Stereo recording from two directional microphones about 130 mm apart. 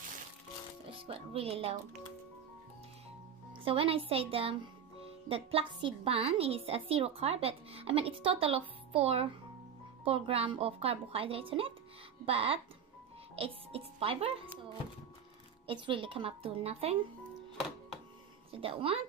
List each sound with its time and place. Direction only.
1.0 s a woman's voice: 50° right (ahead or behind)
3.6 s a woman's voice: 45° right (ahead or behind)
18.5 s a woman's voice: 45° right (ahead or behind)